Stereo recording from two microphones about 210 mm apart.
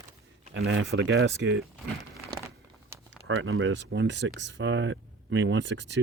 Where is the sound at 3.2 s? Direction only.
60° right (ahead or behind).